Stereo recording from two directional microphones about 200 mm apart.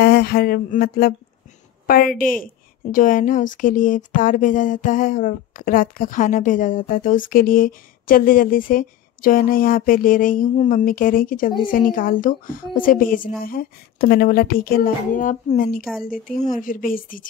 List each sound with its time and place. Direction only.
0.0 s a woman's voice: 55° left (ahead or behind)